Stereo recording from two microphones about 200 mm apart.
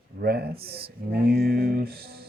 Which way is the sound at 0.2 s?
55° right (ahead or behind).